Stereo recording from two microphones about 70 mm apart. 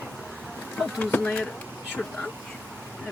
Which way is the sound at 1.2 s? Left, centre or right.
Centre.